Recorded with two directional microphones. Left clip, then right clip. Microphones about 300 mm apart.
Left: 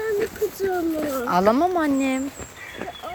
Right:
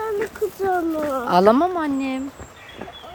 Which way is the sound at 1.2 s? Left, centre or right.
Centre.